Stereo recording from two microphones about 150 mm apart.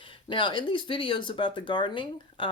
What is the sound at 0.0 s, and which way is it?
Speech, 35° left (ahead or behind).